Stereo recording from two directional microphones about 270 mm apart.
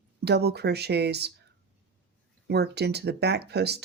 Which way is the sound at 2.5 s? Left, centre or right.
Right.